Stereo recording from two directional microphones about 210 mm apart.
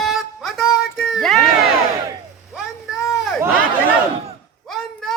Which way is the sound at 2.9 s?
15° left (ahead or behind).